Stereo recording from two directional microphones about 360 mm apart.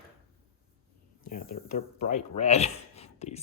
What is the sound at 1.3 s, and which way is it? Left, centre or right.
Speech, left.